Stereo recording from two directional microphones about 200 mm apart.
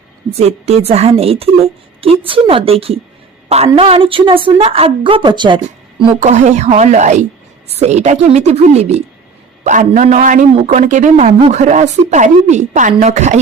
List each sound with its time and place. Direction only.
0.3 s a woman's voice: 30° right (ahead or behind)
6.0 s speech: 35° right (ahead or behind)
11.3 s a woman's voice: 25° right (ahead or behind)
11.6 s speech: 35° right (ahead or behind)